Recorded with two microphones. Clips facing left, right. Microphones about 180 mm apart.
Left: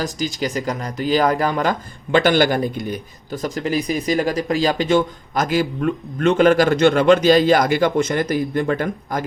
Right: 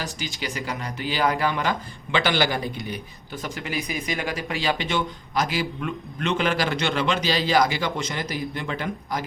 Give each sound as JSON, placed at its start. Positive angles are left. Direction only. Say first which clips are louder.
{"t": 0.0, "sound": "speech", "louder": "left 9 dB", "side_deg": 40}